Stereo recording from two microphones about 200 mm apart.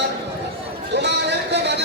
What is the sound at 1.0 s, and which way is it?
Sheep, 60° right (ahead or behind).